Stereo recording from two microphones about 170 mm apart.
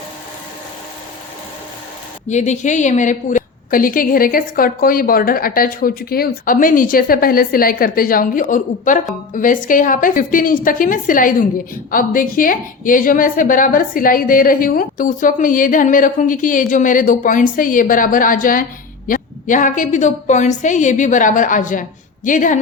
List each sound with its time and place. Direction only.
2.3 s a woman's voice: 45° left (ahead or behind)